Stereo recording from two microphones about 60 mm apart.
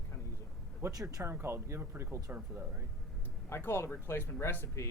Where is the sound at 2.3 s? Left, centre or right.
Right.